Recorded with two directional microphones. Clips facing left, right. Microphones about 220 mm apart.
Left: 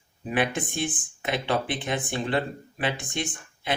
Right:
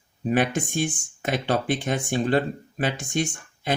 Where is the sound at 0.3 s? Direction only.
45° right (ahead or behind).